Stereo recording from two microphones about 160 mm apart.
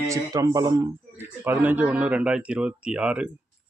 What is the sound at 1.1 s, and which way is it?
Speech, 15° right (ahead or behind).